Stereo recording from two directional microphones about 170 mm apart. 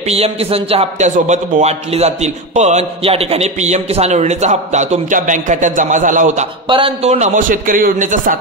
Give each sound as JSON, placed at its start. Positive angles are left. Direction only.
{"t": 0.1, "sound": "speech", "side_deg": -35}
{"t": 6.7, "sound": "a man's voice", "side_deg": -35}